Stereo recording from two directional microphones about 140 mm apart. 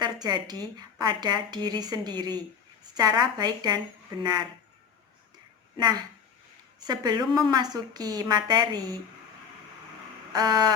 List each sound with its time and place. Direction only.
0.0 s a sound: 30° right (ahead or behind)
0.6 s a woman's voice: 30° right (ahead or behind)
5.7 s a woman's voice: 30° right (ahead or behind)
10.3 s a woman's voice: 30° right (ahead or behind)